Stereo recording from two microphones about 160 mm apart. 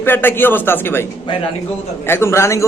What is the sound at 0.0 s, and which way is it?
A man's voice, 10° left (ahead or behind).